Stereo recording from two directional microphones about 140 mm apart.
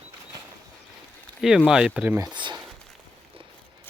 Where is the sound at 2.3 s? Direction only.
35° right (ahead or behind).